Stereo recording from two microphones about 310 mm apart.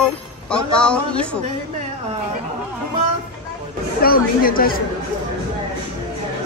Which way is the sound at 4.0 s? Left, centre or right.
Left.